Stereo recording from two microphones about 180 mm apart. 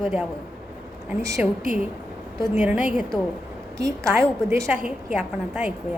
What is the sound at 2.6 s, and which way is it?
A woman's voice, 5° right (ahead or behind).